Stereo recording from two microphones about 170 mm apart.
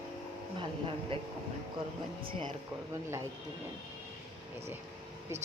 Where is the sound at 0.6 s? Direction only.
30° right (ahead or behind).